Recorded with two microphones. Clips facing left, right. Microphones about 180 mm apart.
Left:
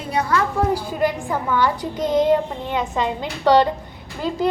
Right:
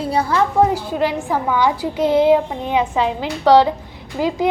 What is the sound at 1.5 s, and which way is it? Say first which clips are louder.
A woman's voice: right 1 dB; 10° right (ahead or behind).